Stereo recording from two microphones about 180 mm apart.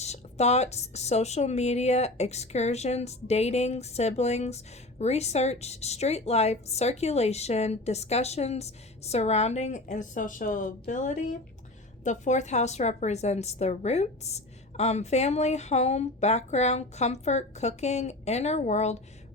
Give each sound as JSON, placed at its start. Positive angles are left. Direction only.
{"t": 0.0, "sound": "speech", "side_deg": 40}